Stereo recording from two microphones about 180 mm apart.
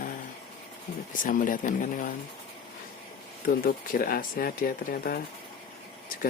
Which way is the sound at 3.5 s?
55° left (ahead or behind).